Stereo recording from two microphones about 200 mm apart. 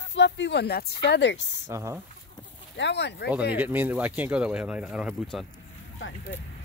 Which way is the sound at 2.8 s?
60° left (ahead or behind).